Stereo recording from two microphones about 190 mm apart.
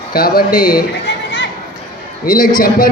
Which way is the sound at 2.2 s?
45° left (ahead or behind).